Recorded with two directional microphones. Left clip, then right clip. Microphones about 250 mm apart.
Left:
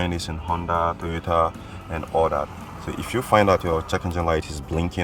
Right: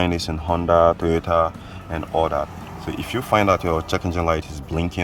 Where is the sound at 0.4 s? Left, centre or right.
Right.